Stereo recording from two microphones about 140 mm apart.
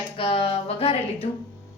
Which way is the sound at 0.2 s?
40° left (ahead or behind).